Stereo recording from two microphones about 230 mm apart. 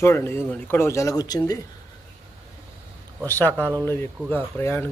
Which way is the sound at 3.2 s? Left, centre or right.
Centre.